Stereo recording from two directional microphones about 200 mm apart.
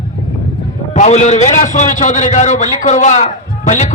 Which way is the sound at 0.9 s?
35° left (ahead or behind).